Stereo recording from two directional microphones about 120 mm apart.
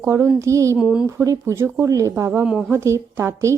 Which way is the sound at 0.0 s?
20° right (ahead or behind).